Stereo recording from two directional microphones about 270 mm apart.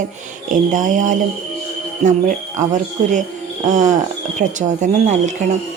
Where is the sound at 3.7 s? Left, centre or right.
Right.